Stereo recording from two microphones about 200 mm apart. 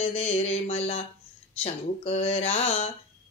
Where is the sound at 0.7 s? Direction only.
35° left (ahead or behind).